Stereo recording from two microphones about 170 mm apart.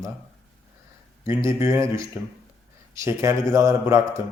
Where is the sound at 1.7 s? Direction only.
15° right (ahead or behind).